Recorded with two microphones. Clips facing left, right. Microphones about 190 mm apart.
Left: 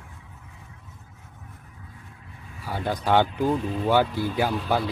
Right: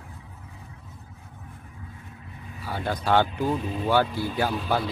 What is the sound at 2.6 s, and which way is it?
Speech, 15° left (ahead or behind).